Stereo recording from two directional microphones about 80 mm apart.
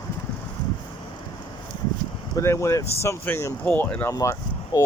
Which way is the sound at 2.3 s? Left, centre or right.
Left.